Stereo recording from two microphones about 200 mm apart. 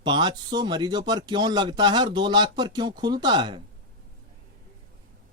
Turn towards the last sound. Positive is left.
turn(degrees=-20)  # may be behind; listen again after turning